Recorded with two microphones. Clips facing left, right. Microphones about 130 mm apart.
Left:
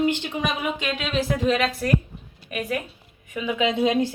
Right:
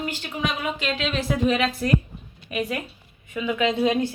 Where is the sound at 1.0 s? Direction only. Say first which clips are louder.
Right 1 dB; centre (ahead or behind).